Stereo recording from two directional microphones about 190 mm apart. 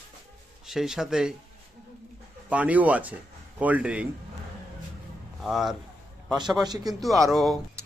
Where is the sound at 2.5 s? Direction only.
10° right (ahead or behind).